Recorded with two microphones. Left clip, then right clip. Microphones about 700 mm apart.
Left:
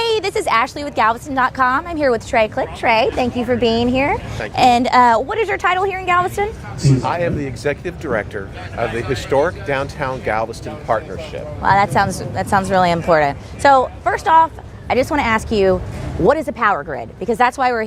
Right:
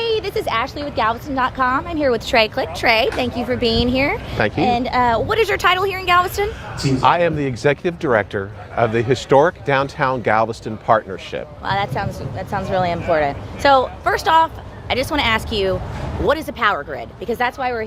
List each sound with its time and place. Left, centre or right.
0.0 s a woman's voice: left
3.8 s a woman's voice: left
4.5 s speech: left
5.3 s a woman's voice: left
7.0 s speech: right
11.6 s a woman's voice: left